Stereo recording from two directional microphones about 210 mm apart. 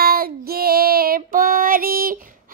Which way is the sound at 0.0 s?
45° right (ahead or behind).